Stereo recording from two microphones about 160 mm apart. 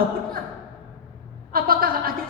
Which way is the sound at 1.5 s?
65° right (ahead or behind).